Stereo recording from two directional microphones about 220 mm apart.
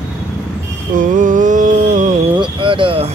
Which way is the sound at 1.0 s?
35° right (ahead or behind).